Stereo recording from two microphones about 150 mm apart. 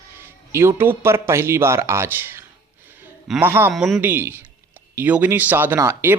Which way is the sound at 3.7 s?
Centre (ahead or behind).